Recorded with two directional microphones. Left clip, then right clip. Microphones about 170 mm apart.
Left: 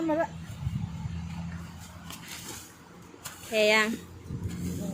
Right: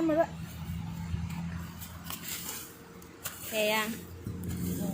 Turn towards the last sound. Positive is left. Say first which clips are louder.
# left 6 dB
turn(degrees=90)